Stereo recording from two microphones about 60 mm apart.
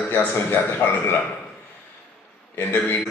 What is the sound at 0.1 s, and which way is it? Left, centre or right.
A man's voice, left.